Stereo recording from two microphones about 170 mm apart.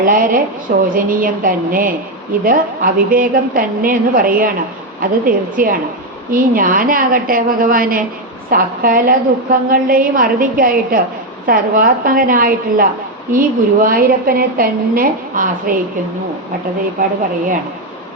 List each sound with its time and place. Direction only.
0.0 s a woman's voice: 55° right (ahead or behind)
17.0 s a woman's voice: 55° right (ahead or behind)